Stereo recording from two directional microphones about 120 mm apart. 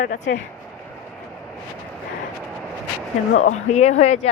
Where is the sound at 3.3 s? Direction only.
75° left (ahead or behind).